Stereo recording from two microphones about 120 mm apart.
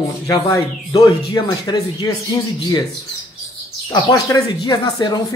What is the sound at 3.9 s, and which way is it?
Speech, 30° left (ahead or behind).